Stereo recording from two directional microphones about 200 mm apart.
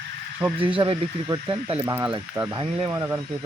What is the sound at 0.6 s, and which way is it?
Speech, 25° right (ahead or behind).